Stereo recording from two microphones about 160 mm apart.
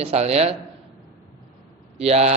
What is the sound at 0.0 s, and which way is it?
Speech, 40° right (ahead or behind).